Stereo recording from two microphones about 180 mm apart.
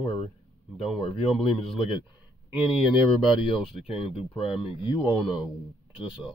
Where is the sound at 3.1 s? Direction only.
30° left (ahead or behind).